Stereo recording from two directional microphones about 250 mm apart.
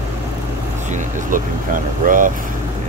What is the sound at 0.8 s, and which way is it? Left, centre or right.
Speech, right.